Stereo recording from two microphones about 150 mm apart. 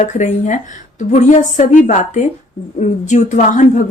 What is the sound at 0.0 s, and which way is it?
Speech, 50° left (ahead or behind).